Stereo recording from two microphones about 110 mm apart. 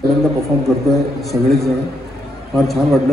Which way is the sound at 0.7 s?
Centre (ahead or behind).